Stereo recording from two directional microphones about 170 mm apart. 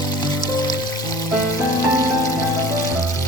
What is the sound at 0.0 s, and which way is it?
Music, 25° left (ahead or behind).